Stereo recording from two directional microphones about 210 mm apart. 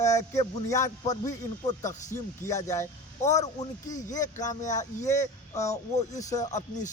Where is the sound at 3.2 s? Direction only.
35° left (ahead or behind).